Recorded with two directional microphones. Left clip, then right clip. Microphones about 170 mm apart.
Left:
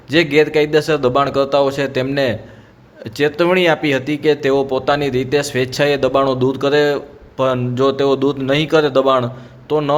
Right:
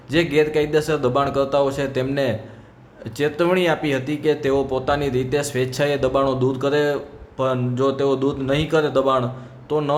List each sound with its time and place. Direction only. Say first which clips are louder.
0.1 s speech: left 5 dB; 20° left (ahead or behind)